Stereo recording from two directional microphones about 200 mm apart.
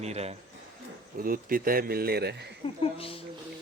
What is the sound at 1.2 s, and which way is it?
Speech, 45° right (ahead or behind).